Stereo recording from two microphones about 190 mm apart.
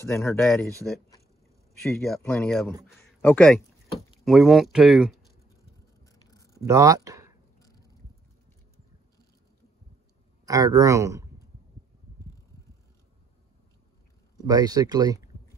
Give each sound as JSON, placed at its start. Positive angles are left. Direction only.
{"t": 0.0, "sound": "speech", "side_deg": 15}
{"t": 0.4, "sound": "speech", "side_deg": 0}
{"t": 1.8, "sound": "speech", "side_deg": 0}
{"t": 6.1, "sound": "a sound", "side_deg": 20}
{"t": 6.6, "sound": "speech", "side_deg": -15}
{"t": 7.5, "sound": "a sound", "side_deg": 20}
{"t": 10.4, "sound": "speech", "side_deg": -20}
{"t": 14.4, "sound": "speech", "side_deg": -20}